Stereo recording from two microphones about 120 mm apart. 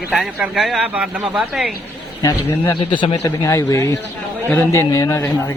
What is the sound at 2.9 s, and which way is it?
Speech, 45° left (ahead or behind).